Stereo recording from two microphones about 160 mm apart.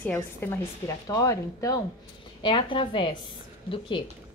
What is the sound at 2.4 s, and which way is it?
A woman's voice, 30° left (ahead or behind).